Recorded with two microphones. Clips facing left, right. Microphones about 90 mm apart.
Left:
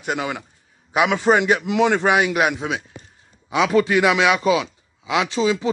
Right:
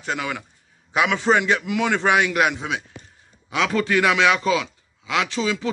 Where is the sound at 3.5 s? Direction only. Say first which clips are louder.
Left 4 dB; 15° left (ahead or behind).